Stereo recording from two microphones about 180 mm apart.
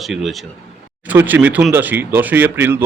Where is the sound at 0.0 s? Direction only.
Centre (ahead or behind).